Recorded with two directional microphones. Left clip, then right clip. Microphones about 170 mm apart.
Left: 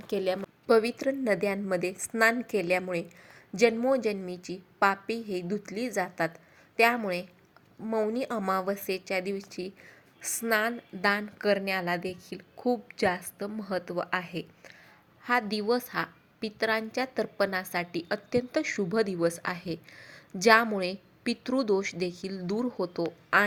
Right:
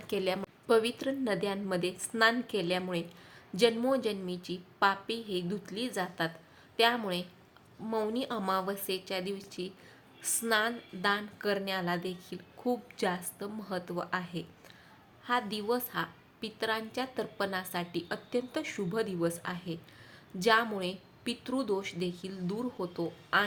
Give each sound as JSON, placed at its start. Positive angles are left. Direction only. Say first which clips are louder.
{"t": 0.1, "sound": "a woman's voice", "louder": "left 3 dB", "side_deg": 25}
{"t": 5.5, "sound": "a woman's voice", "louder": "left 4 dB", "side_deg": 35}
{"t": 7.9, "sound": "speech", "louder": "left 4 dB", "side_deg": 20}
{"t": 8.1, "sound": "a woman's voice", "louder": "left 3 dB", "side_deg": 35}